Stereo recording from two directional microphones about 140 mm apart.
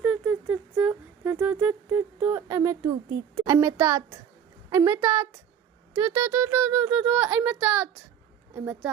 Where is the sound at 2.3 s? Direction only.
25° right (ahead or behind).